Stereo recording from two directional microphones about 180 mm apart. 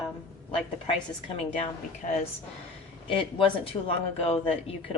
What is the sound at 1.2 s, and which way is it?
A woman's voice, 30° left (ahead or behind).